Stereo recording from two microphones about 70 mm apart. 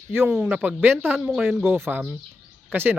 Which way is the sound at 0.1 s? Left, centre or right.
Right.